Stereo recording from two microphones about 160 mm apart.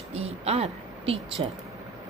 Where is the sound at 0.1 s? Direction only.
40° right (ahead or behind).